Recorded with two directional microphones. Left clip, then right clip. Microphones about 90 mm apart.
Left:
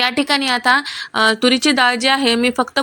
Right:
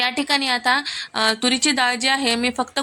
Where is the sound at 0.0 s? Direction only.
35° left (ahead or behind).